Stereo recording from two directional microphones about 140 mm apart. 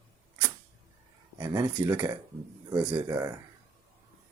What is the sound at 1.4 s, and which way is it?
Speech, 25° right (ahead or behind).